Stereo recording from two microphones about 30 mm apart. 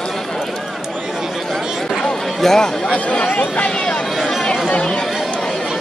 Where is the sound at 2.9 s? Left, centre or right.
Left.